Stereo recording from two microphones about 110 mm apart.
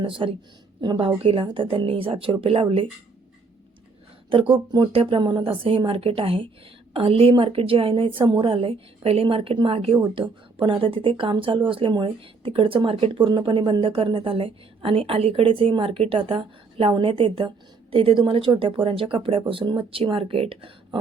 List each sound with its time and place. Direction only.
0.0 s a woman's voice: 50° right (ahead or behind)
1.2 s speech: 60° right (ahead or behind)
4.3 s a woman's voice: 50° right (ahead or behind)